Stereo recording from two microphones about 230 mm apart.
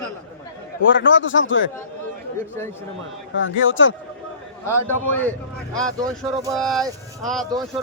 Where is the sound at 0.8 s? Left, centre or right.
Left.